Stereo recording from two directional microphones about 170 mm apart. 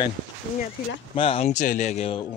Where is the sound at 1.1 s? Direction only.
35° left (ahead or behind).